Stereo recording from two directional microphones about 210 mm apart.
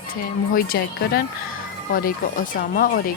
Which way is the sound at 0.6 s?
45° left (ahead or behind).